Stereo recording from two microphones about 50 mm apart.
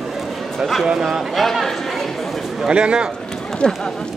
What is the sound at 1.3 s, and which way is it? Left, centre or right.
Speech, centre.